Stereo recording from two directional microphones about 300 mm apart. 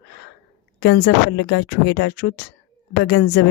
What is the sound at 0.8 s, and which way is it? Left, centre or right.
Speech, left.